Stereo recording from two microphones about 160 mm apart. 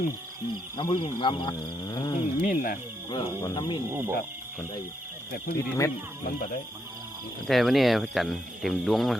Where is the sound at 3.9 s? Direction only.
15° right (ahead or behind).